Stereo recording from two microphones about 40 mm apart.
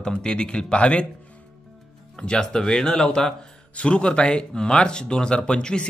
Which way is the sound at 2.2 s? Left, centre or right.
Centre.